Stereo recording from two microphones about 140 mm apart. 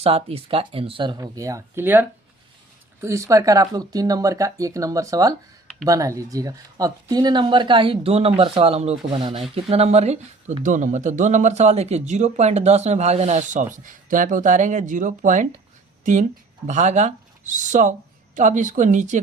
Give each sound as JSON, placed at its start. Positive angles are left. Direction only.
{"t": 0.0, "sound": "speech", "side_deg": -45}
{"t": 1.2, "sound": "speech", "side_deg": -25}
{"t": 10.6, "sound": "speech", "side_deg": -65}
{"t": 13.8, "sound": "speech", "side_deg": -70}